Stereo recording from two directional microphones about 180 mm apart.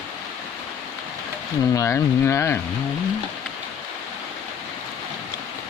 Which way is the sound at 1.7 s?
15° left (ahead or behind).